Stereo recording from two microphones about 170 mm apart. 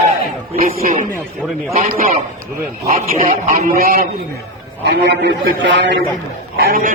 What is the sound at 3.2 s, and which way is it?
Speech, 55° right (ahead or behind).